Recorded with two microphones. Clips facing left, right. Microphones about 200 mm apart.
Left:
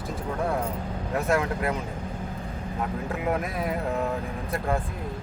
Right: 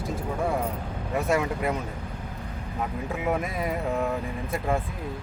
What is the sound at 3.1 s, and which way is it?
Speech, centre (ahead or behind).